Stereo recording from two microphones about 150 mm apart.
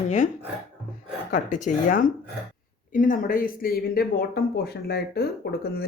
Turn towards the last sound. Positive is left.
turn(degrees=90)